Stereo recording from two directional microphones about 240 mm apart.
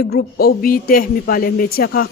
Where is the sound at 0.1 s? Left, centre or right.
Left.